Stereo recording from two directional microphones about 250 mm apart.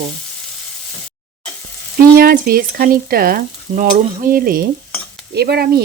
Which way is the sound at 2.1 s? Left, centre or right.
Right.